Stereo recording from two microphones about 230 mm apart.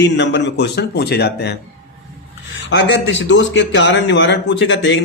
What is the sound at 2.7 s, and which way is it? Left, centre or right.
Speech, left.